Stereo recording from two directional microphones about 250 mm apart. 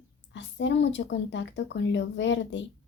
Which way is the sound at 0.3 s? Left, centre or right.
Left.